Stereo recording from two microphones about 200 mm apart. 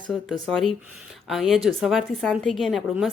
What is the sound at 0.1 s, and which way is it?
Speech, centre (ahead or behind).